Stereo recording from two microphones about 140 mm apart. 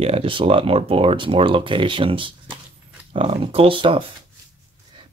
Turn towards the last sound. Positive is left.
turn(degrees=-40)  # may be behind; listen again after turning